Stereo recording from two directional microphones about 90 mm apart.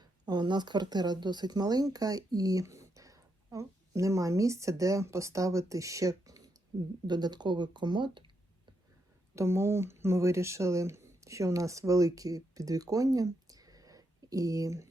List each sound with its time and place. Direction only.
0.0 s speech: 55° right (ahead or behind)
7.1 s speech: 50° right (ahead or behind)
9.3 s speech: 30° right (ahead or behind)